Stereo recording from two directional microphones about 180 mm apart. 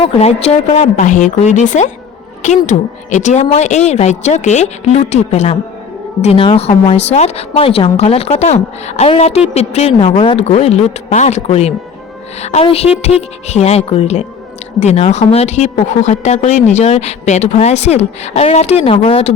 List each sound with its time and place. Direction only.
0.2 s a woman's voice: 35° left (ahead or behind)